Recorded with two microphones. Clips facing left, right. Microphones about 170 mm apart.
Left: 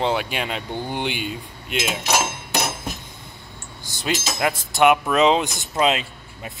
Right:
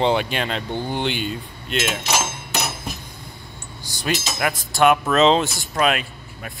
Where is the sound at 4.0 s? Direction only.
25° left (ahead or behind).